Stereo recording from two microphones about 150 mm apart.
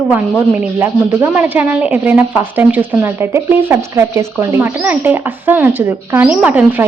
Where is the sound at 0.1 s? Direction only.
15° right (ahead or behind).